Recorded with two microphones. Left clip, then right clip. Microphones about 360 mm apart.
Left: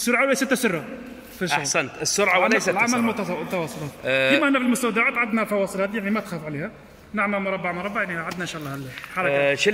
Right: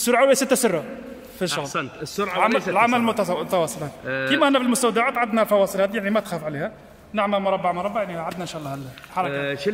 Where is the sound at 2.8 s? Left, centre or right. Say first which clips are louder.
Right 3 dB; centre.